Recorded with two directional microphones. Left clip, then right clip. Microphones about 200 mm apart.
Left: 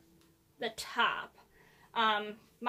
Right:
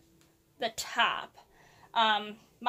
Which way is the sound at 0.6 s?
45° right (ahead or behind).